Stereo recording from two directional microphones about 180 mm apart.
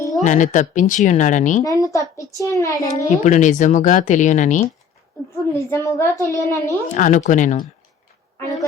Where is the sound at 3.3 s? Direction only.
45° left (ahead or behind).